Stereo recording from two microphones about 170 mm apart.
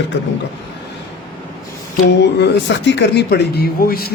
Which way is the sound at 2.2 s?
85° left.